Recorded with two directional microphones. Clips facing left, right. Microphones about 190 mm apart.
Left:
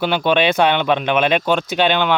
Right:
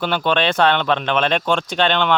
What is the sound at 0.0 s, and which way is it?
Speech, 10° left (ahead or behind).